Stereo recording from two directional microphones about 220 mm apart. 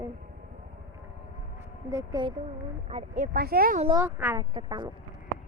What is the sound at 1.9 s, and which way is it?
Speech, 15° right (ahead or behind).